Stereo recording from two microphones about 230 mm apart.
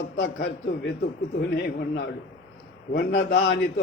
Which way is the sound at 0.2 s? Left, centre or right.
Left.